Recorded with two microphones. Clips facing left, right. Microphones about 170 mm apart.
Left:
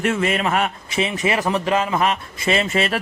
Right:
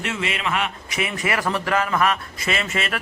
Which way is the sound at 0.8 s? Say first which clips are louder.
Left 4 dB; 30° left (ahead or behind).